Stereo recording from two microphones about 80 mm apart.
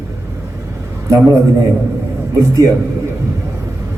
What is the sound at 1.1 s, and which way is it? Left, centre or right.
A man's voice, right.